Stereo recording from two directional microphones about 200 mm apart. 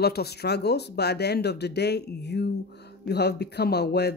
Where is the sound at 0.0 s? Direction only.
55° left (ahead or behind).